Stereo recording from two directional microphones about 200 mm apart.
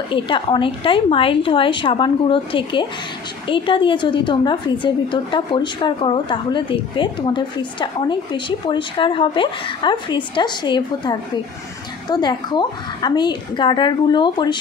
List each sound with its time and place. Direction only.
0.1 s a woman's voice: 25° left (ahead or behind)